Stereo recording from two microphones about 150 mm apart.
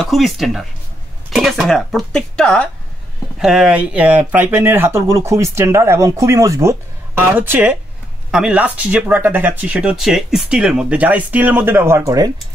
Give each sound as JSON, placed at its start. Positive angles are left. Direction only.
{"t": 0.0, "sound": "speech", "side_deg": 0}